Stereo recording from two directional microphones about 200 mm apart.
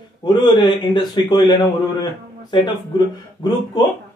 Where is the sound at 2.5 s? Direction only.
25° left (ahead or behind).